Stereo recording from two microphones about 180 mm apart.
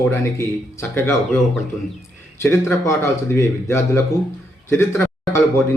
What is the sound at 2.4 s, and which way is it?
A man's voice, 15° left (ahead or behind).